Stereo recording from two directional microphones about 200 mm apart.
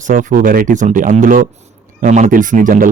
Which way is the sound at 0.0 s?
40° right (ahead or behind).